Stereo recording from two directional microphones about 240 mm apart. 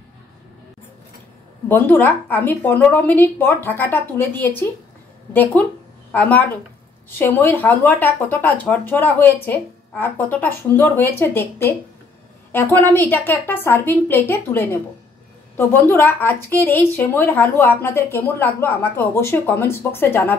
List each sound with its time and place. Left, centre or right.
1.7 s a woman's voice: centre